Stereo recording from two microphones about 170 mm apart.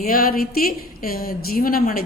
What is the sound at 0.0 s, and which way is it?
A woman's voice, 60° left (ahead or behind).